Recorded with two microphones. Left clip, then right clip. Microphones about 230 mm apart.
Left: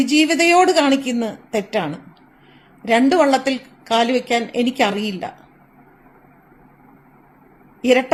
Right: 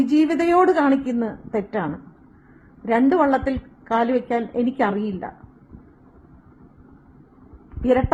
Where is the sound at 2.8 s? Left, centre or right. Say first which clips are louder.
Left 3 dB; left.